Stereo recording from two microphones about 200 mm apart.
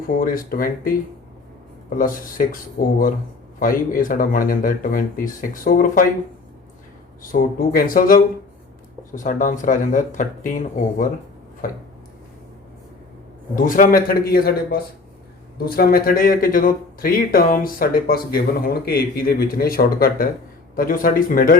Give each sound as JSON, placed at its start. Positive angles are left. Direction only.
{"t": 0.1, "sound": "speech", "side_deg": 45}
{"t": 2.0, "sound": "speech", "side_deg": 45}
{"t": 7.2, "sound": "speech", "side_deg": 45}
{"t": 13.7, "sound": "speech", "side_deg": 45}